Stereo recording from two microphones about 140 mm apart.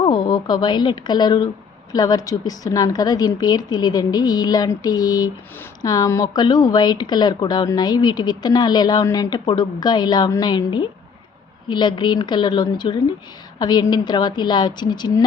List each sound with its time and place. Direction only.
0.0 s a woman's voice: 30° left (ahead or behind)